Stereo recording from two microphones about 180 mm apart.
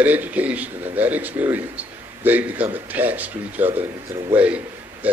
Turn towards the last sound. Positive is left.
turn(degrees=-10)  # may be behind; listen again after turning